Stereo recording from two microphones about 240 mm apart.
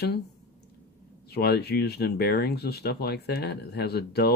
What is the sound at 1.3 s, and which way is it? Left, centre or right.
Speech, left.